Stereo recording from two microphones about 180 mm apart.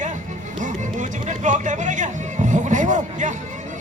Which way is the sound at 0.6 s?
45° right (ahead or behind).